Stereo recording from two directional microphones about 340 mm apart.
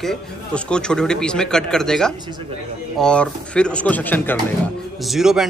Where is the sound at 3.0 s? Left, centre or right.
Centre.